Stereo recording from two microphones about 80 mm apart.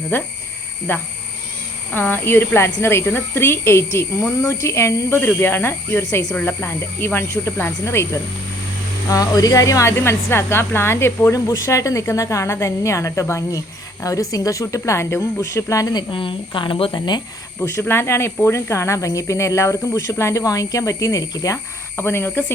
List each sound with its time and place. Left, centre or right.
0.1 s speech: left
9.0 s speech: left
15.9 s speech: left
17.6 s speech: left
21.9 s speech: left